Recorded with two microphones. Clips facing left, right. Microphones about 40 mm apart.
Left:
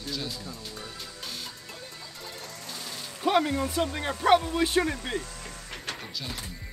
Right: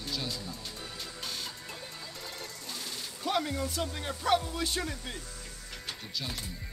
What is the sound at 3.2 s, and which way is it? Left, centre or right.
Speech, left.